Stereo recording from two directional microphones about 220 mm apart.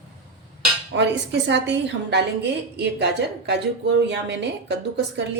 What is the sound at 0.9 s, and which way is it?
A woman's voice, 55° right (ahead or behind).